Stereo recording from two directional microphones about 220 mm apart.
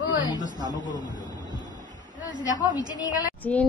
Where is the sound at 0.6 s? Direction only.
20° right (ahead or behind).